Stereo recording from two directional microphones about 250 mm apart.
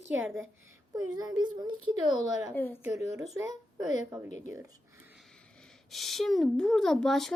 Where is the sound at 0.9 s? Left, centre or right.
Centre.